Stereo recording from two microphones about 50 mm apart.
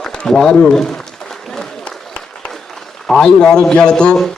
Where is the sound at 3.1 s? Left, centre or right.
Centre.